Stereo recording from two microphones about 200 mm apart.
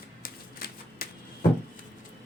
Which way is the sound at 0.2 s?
50° left (ahead or behind).